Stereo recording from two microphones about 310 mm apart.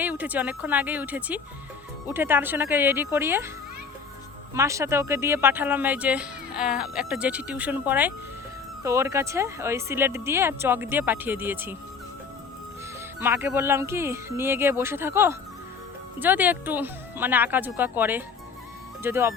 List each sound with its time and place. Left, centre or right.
0.0 s speech: centre
4.5 s speech: centre
13.1 s speech: centre